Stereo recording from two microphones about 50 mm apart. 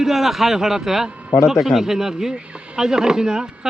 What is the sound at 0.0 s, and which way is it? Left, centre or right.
Speech, centre.